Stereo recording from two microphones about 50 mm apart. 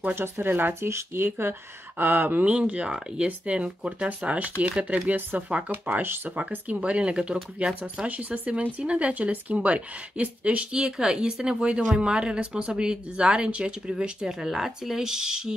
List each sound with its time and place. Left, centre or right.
0.1 s speech: right
0.8 s speech: right
5.0 s speech: right
10.8 s a woman's voice: centre